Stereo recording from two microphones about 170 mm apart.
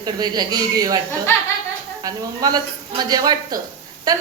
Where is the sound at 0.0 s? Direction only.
25° right (ahead or behind).